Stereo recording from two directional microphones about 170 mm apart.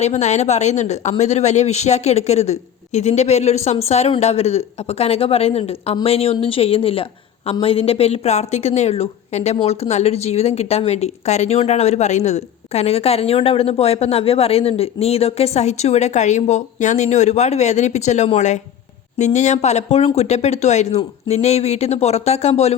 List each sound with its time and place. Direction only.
0.0 s speech: 40° left (ahead or behind)